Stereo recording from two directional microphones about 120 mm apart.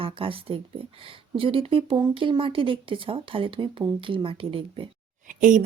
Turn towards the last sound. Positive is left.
turn(degrees=-90)